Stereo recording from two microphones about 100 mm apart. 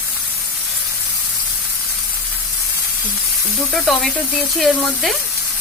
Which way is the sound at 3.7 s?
Centre (ahead or behind).